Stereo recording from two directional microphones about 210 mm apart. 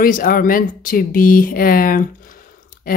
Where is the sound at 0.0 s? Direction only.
40° left (ahead or behind).